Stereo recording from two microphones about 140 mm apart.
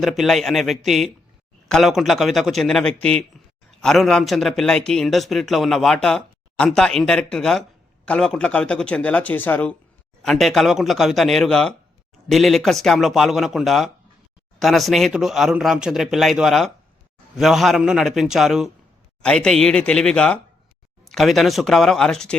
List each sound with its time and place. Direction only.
0.0 s a man's voice: centre (ahead or behind)